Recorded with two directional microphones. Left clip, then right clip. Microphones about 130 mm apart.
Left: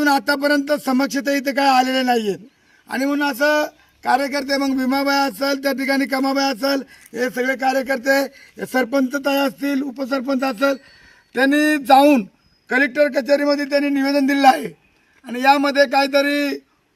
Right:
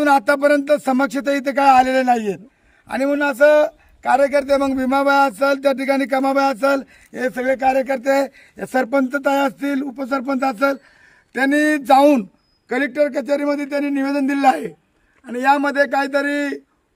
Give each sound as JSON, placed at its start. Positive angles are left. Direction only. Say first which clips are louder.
{"t": 0.0, "sound": "a man's voice", "louder": "right 3 dB", "side_deg": -15}
{"t": 11.4, "sound": "a sound", "louder": "even", "side_deg": 15}
{"t": 12.6, "sound": "a man's voice", "louder": "left 2 dB", "side_deg": 35}
{"t": 15.2, "sound": "a man's voice", "louder": "left 1 dB", "side_deg": 90}